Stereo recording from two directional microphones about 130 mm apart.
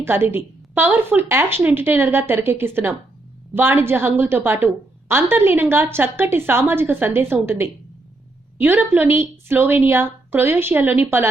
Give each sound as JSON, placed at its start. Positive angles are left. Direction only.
{"t": 0.0, "sound": "a woman's voice", "side_deg": -15}